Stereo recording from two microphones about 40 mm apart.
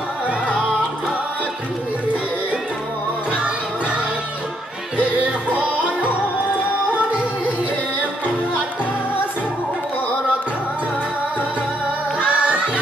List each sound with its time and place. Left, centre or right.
3.3 s music: right
12.2 s music: right